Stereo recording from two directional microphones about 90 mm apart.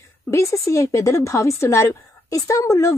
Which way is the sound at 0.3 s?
30° left (ahead or behind).